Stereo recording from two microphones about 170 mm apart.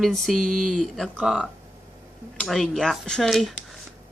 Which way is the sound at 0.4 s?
55° right (ahead or behind).